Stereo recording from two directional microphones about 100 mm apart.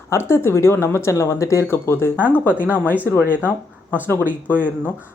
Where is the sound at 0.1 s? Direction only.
25° left (ahead or behind).